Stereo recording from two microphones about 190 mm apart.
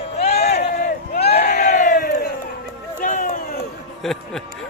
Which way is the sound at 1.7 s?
45° left (ahead or behind).